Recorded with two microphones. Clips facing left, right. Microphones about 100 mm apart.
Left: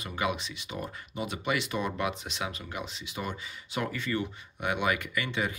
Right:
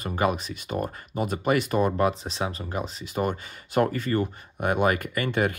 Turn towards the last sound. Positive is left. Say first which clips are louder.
# right 7 dB
turn(degrees=-50)  # may be behind; listen again after turning